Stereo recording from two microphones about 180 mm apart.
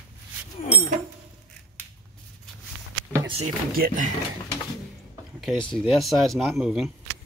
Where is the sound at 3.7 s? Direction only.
50° right (ahead or behind).